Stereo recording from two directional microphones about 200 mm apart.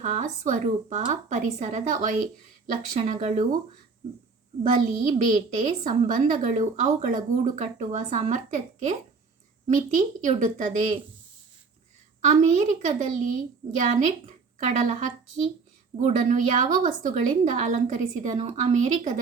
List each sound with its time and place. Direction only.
0.0 s a woman's voice: 40° right (ahead or behind)
4.6 s a woman's voice: 40° right (ahead or behind)
12.2 s a woman's voice: 35° right (ahead or behind)